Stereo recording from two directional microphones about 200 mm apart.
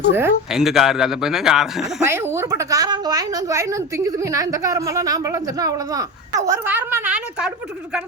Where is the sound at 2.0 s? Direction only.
10° right (ahead or behind).